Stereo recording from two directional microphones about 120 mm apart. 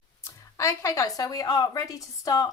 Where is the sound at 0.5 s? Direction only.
25° left (ahead or behind).